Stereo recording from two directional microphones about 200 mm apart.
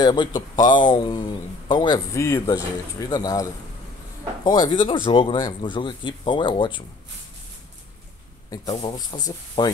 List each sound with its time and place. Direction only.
0.0 s a man's voice: 20° left (ahead or behind)
4.5 s a man's voice: 20° left (ahead or behind)
8.8 s a man's voice: 20° left (ahead or behind)